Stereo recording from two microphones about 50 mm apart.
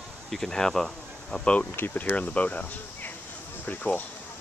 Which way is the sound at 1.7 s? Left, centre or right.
Left.